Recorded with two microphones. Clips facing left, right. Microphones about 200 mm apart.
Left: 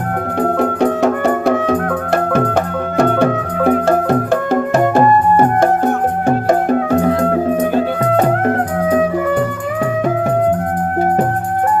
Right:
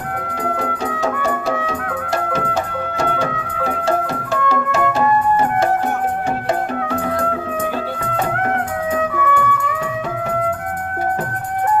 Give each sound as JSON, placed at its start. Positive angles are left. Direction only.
{"t": 0.6, "sound": "music", "side_deg": 60}
{"t": 6.2, "sound": "music", "side_deg": 45}
{"t": 9.1, "sound": "music", "side_deg": 35}